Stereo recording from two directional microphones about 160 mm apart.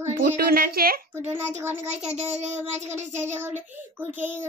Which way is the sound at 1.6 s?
15° right (ahead or behind).